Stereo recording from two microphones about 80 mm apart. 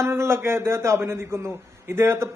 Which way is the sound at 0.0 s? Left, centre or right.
Right.